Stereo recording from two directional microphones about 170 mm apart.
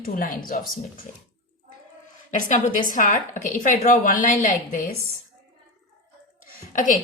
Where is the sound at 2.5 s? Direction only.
50° left (ahead or behind).